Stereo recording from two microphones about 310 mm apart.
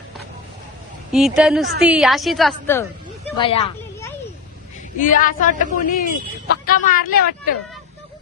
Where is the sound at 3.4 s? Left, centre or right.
Centre.